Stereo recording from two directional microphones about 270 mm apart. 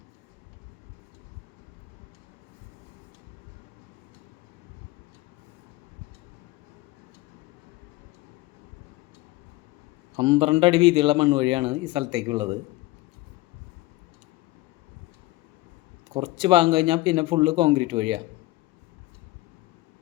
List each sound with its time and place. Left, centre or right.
10.2 s a man's voice: centre
16.1 s a man's voice: centre